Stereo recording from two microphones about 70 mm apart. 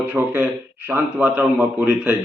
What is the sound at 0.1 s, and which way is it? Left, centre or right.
A man's voice, right.